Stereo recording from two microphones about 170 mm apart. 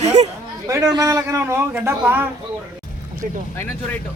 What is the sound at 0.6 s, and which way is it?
A man's voice, 20° right (ahead or behind).